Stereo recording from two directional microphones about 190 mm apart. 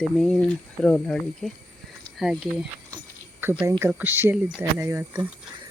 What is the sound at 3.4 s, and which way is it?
Speech, 10° right (ahead or behind).